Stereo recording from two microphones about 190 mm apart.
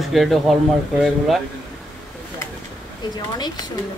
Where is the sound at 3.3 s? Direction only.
20° left (ahead or behind).